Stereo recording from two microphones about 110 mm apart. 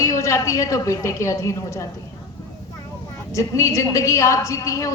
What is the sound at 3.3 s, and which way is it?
A woman's voice, 25° left (ahead or behind).